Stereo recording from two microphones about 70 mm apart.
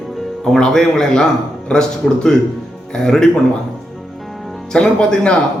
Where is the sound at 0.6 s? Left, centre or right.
Centre.